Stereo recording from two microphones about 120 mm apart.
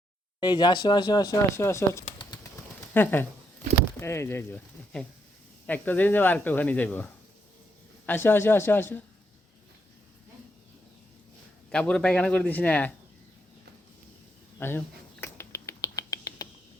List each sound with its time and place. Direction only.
0.3 s speech: 35° left (ahead or behind); by 4.6 s 20° left (ahead or behind)
5.6 s speech: 15° left (ahead or behind)
11.7 s speech: 10° left (ahead or behind)
14.6 s finger snapping: 20° left (ahead or behind)